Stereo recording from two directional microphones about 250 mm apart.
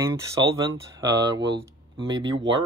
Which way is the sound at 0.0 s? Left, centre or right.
Centre.